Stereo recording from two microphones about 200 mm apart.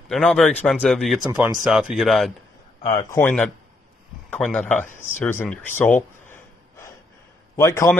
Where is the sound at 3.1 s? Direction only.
10° left (ahead or behind).